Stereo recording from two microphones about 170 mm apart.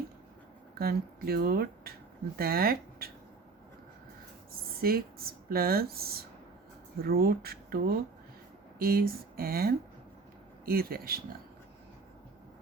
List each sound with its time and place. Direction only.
0.8 s speech: 65° right (ahead or behind)
4.8 s speech: 60° right (ahead or behind)